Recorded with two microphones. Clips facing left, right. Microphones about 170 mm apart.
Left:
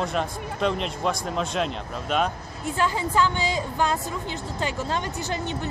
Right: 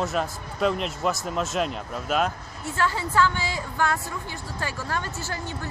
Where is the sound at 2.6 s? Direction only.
15° left (ahead or behind).